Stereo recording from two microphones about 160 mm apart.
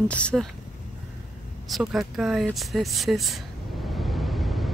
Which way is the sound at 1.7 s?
Centre (ahead or behind).